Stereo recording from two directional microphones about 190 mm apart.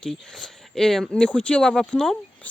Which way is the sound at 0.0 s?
Centre (ahead or behind).